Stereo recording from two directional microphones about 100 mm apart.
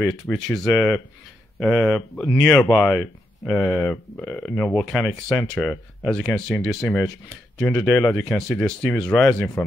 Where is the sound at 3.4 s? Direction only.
10° left (ahead or behind).